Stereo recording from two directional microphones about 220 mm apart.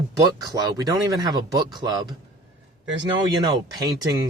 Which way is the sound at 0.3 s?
15° right (ahead or behind).